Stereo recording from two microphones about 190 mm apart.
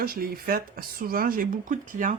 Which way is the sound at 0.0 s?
50° right (ahead or behind).